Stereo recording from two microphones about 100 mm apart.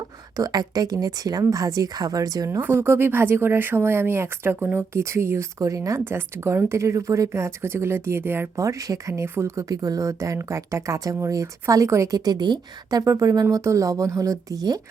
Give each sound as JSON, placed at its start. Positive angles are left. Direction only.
{"t": 0.3, "sound": "speech", "side_deg": -40}
{"t": 2.6, "sound": "speech", "side_deg": -20}